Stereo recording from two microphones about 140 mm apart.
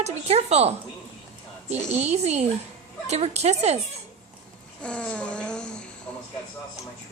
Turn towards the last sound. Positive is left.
turn(degrees=5)  # may be behind; listen again after turning